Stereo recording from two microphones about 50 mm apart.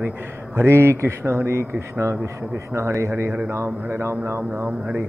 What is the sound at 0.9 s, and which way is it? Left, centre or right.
Speech, right.